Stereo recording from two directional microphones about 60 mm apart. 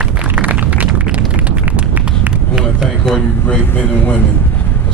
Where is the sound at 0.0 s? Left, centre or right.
Right.